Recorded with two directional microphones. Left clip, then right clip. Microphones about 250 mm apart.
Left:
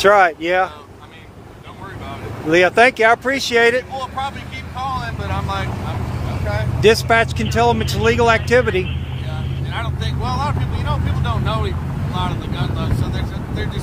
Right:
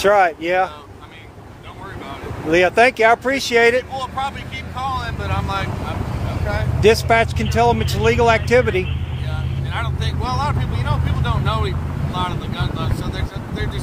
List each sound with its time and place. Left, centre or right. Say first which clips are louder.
0.0 s speech: left 2 dB; centre
2.5 s speech: left 1 dB; centre
3.9 s speech: even; centre
6.8 s speech: left 1 dB; centre
9.8 s speech: right 1 dB; centre